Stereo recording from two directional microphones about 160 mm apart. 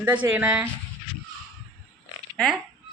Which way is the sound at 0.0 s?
10° right (ahead or behind).